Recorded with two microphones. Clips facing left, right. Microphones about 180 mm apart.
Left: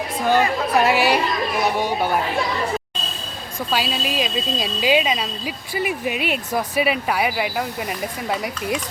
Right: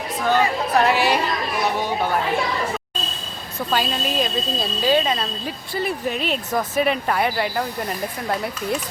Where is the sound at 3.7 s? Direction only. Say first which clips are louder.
Right 1 dB; 10° left (ahead or behind).